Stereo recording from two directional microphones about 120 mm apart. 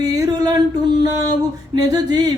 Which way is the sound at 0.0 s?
30° right (ahead or behind).